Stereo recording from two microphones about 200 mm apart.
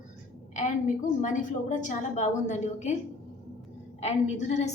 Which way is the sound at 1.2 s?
40° left (ahead or behind).